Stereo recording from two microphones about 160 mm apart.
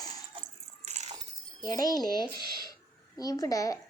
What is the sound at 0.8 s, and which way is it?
Coin, 45° right (ahead or behind).